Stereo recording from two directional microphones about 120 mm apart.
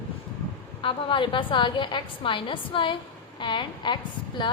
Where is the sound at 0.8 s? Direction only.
45° left (ahead or behind).